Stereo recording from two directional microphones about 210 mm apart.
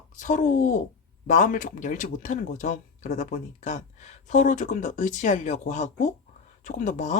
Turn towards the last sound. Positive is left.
turn(degrees=35)  # may be behind; listen again after turning